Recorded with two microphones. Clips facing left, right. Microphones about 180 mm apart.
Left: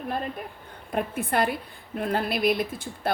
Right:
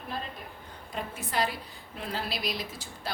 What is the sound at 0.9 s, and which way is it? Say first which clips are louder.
Speech: left 9 dB; 55° left (ahead or behind).